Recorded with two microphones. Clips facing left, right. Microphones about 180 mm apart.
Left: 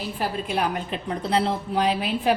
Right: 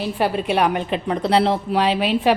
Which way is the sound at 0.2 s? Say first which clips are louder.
Right 7 dB; 75° right (ahead or behind).